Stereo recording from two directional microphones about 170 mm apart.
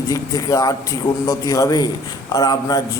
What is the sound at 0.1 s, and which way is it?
A man's voice, 20° left (ahead or behind).